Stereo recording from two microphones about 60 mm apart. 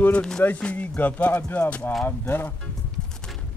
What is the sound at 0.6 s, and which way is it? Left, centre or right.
Speech, centre.